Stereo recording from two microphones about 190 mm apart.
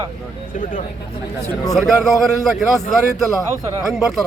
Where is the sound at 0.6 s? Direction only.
40° left (ahead or behind).